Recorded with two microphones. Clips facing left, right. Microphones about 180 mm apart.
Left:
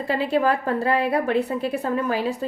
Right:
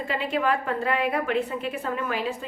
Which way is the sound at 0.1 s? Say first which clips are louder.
Left 5 dB; 35° left (ahead or behind).